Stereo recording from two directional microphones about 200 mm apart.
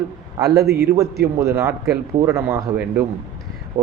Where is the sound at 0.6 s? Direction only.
55° right (ahead or behind).